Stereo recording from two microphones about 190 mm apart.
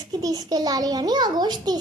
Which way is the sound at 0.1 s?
20° right (ahead or behind).